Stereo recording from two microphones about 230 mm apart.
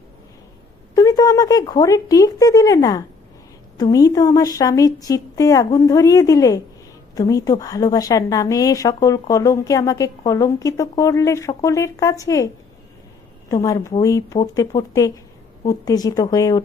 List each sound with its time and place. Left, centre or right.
0.9 s a woman's voice: centre
13.5 s a woman's voice: centre